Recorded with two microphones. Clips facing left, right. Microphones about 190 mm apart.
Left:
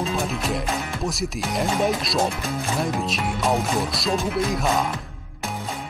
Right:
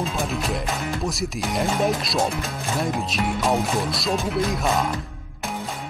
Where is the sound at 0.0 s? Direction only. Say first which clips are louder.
Left 1 dB; centre (ahead or behind).